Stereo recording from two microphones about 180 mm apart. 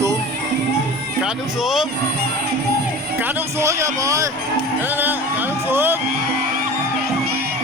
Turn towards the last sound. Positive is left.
turn(degrees=-10)  # may be behind; listen again after turning